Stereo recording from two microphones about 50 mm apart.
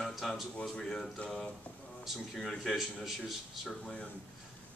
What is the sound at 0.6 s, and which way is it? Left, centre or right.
Speech, centre.